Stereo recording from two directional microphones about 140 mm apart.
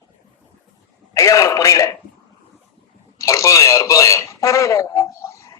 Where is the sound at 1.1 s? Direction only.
20° left (ahead or behind).